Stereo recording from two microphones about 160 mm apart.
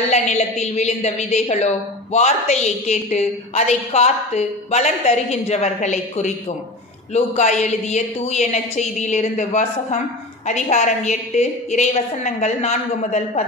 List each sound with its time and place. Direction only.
0.1 s a woman's voice: 45° left (ahead or behind)